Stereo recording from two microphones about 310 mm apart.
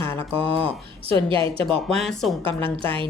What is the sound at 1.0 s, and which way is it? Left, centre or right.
A woman's voice, centre.